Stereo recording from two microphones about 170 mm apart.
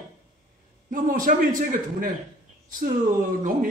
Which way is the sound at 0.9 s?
55° right (ahead or behind).